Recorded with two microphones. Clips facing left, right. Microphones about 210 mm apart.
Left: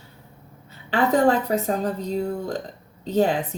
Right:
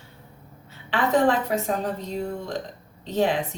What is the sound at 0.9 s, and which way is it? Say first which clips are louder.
A woman's voice: left 2 dB; 40° left (ahead or behind).